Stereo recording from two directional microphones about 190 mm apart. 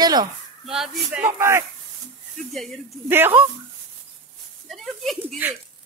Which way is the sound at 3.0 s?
10° right (ahead or behind).